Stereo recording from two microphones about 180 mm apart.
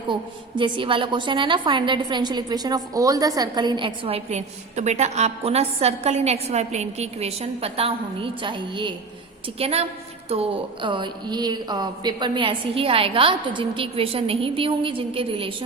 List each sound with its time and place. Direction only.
0.1 s a woman's voice: 25° right (ahead or behind)